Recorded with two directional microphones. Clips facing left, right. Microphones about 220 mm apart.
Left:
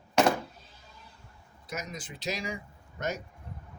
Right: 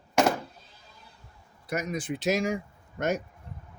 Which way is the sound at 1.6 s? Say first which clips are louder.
Right 8 dB; 60° right (ahead or behind).